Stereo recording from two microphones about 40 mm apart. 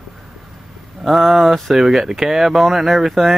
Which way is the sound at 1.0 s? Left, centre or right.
Centre.